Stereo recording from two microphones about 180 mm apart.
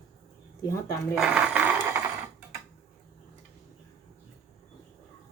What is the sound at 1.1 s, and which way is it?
Mechanisms, 5° right (ahead or behind).